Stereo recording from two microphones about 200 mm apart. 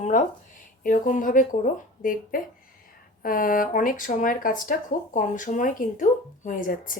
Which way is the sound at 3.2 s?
45° left (ahead or behind).